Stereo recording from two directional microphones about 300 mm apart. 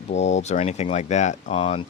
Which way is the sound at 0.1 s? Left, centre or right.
Left.